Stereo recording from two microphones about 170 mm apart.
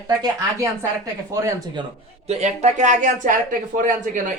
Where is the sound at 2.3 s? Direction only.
40° right (ahead or behind).